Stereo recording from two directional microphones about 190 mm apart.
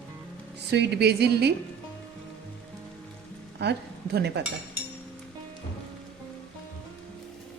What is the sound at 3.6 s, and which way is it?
Speech, 60° right (ahead or behind).